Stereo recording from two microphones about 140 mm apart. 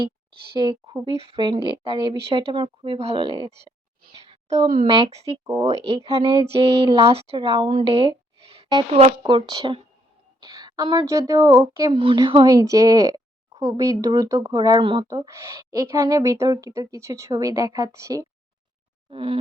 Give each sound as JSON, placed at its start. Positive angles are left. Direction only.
{"t": 0.5, "sound": "speech", "side_deg": -35}
{"t": 4.9, "sound": "speech", "side_deg": -40}
{"t": 11.9, "sound": "a woman's voice", "side_deg": -35}
{"t": 15.0, "sound": "a woman's voice", "side_deg": -25}
{"t": 19.1, "sound": "speech", "side_deg": -40}